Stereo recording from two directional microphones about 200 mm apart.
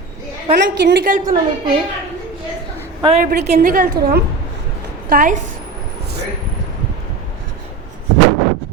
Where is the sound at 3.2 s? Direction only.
45° right (ahead or behind).